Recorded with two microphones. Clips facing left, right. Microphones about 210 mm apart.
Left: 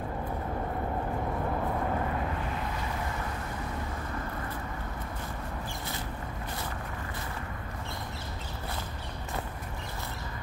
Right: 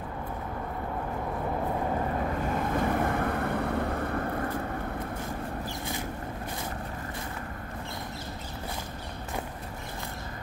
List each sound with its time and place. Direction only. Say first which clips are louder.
2.7 s vehicle: right 9 dB; 55° right (ahead or behind)